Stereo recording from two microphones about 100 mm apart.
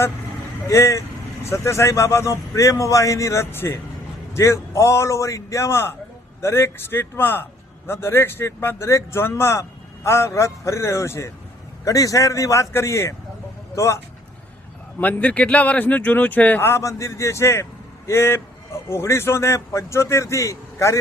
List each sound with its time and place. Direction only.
0.7 s a man's voice: 30° left (ahead or behind)
14.9 s speech: 15° left (ahead or behind)